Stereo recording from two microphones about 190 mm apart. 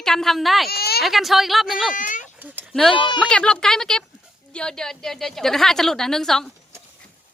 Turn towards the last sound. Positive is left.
turn(degrees=0)  # may be behind; listen again after turning